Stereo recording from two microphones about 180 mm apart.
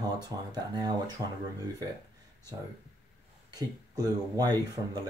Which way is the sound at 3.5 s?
20° right (ahead or behind).